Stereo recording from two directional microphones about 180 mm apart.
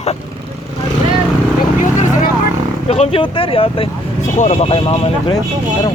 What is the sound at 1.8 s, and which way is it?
Vehicle, 45° left (ahead or behind).